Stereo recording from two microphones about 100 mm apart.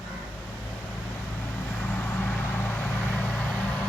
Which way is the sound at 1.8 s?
15° left (ahead or behind).